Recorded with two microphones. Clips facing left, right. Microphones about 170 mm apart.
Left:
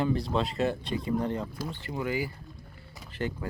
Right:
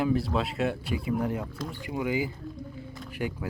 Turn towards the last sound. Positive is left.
turn(degrees=-10)  # may be behind; listen again after turning